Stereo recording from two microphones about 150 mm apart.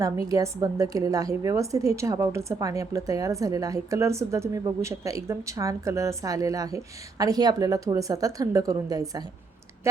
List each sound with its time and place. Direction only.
0.0 s a woman's voice: 25° right (ahead or behind)